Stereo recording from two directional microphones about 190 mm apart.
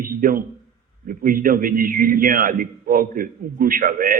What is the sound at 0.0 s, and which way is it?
A man's voice, 50° right (ahead or behind).